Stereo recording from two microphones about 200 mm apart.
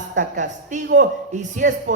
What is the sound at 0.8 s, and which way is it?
Speech, 60° right (ahead or behind).